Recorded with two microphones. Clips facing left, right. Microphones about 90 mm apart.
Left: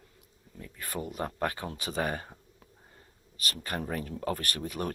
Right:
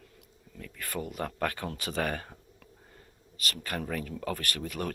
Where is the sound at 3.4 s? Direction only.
30° left (ahead or behind).